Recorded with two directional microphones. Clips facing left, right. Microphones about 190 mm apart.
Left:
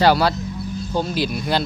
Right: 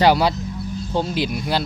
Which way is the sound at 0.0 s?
15° right (ahead or behind).